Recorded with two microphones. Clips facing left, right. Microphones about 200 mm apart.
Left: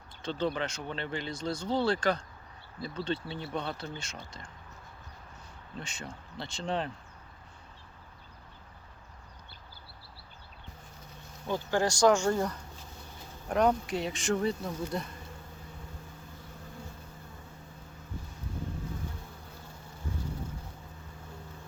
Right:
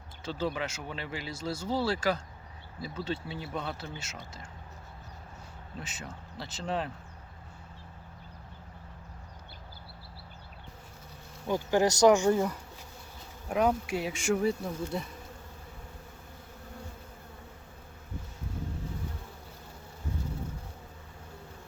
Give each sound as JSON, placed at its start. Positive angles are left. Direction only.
{"t": 0.2, "sound": "speech", "side_deg": -5}
{"t": 5.7, "sound": "speech", "side_deg": -5}
{"t": 11.4, "sound": "speech", "side_deg": -15}